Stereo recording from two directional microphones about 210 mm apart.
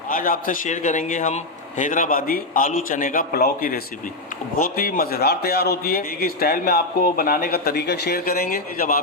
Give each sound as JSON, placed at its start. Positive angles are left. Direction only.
{"t": 0.1, "sound": "a man's voice", "side_deg": 40}